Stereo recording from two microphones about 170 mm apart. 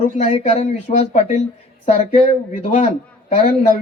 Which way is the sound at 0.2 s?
45° left (ahead or behind).